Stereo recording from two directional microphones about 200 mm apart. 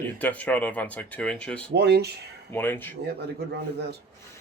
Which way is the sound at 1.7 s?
55° right (ahead or behind).